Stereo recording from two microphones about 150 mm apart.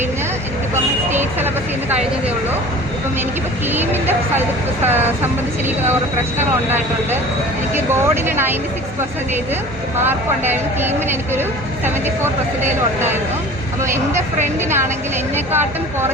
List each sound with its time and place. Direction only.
1.1 s speech: 15° right (ahead or behind)
3.7 s speech: 15° right (ahead or behind)
10.0 s speech: 15° right (ahead or behind)
13.8 s speech: 15° right (ahead or behind)
15.5 s speech: 15° right (ahead or behind)